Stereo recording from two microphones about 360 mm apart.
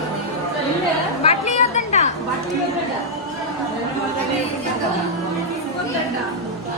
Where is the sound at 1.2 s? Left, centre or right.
Centre.